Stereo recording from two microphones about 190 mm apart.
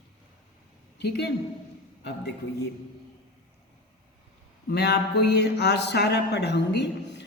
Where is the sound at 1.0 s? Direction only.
60° left (ahead or behind).